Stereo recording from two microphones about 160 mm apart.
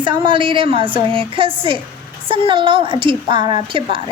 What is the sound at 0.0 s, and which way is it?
A woman's voice, 30° right (ahead or behind).